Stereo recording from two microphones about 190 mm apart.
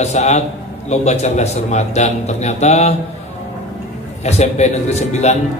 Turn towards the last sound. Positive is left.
turn(degrees=35)  # may be behind; listen again after turning